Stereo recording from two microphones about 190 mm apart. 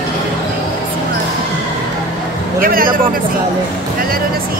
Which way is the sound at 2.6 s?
50° right (ahead or behind).